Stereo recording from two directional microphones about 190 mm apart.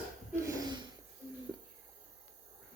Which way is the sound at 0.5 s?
20° right (ahead or behind).